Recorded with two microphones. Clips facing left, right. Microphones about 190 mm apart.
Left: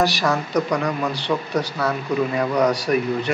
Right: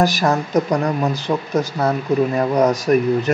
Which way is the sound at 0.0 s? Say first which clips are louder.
Right 3 dB; 45° right (ahead or behind).